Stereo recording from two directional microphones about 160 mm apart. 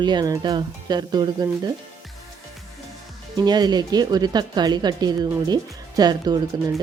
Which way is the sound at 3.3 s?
25° right (ahead or behind).